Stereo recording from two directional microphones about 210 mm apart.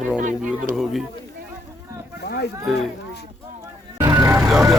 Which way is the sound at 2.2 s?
50° left (ahead or behind).